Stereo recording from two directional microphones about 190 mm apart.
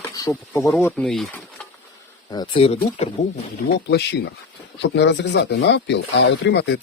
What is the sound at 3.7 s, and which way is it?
Speech, 65° left (ahead or behind).